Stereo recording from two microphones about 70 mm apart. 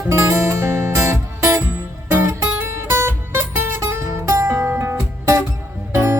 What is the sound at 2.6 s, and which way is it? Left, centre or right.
Music, right.